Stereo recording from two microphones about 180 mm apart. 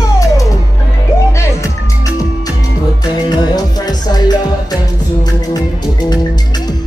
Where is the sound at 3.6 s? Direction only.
20° left (ahead or behind).